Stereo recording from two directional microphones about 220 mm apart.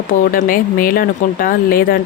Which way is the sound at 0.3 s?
40° left (ahead or behind).